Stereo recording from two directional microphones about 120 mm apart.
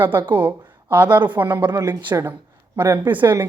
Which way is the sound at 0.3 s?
15° right (ahead or behind).